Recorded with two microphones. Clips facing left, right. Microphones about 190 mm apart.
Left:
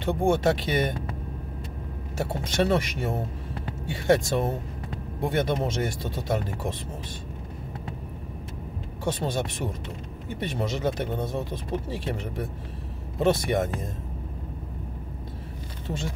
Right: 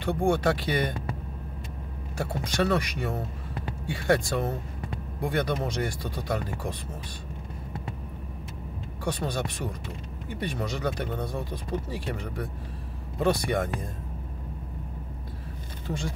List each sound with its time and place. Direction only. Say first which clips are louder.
0.0 s speech: left 2 dB; 20° left (ahead or behind)
2.1 s speech: left 2 dB; 25° left (ahead or behind)
9.0 s speech: left 2 dB; 25° left (ahead or behind)